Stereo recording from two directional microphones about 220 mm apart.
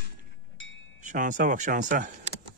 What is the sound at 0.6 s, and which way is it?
Chime, 60° left (ahead or behind).